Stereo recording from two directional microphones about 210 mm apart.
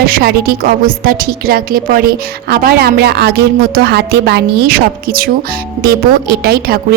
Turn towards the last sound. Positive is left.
turn(degrees=-45)  # may be behind; listen again after turning